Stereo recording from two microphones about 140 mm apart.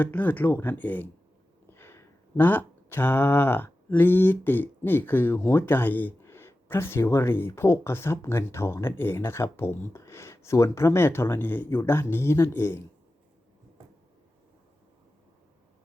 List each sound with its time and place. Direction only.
0.0 s speech: 10° left (ahead or behind)